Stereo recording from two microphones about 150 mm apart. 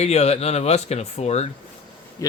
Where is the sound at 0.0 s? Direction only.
45° left (ahead or behind).